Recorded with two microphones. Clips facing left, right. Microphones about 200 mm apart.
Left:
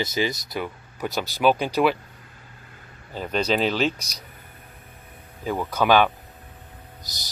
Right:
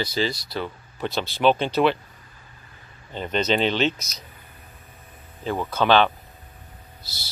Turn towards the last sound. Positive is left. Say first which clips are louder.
# left 1 dB
turn(degrees=15)  # may be behind; listen again after turning